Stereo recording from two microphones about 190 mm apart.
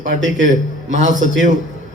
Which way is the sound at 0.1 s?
45° left (ahead or behind).